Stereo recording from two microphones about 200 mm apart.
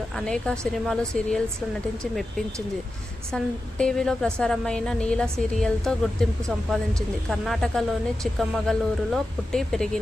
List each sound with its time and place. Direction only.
0.2 s a woman's voice: 5° left (ahead or behind)
3.3 s a woman's voice: 5° left (ahead or behind)
7.3 s a woman's voice: centre (ahead or behind)